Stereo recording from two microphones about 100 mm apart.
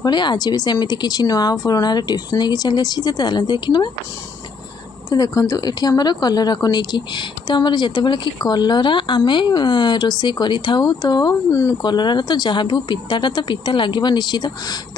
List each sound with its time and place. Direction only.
0.0 s speech: 50° left (ahead or behind)
5.1 s speech: 35° left (ahead or behind)